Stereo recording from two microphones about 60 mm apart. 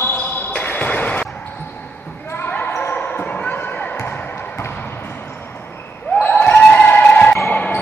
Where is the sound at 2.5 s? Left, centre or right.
Left.